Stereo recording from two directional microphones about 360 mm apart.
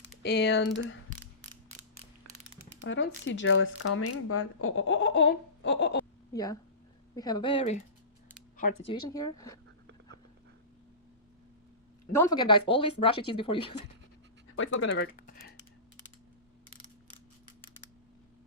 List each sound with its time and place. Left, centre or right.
0.2 s speech: left
2.8 s speech: left
6.3 s speech: centre
8.9 s speech: centre
12.3 s speech: centre
14.5 s speech: left
14.9 s a sound: left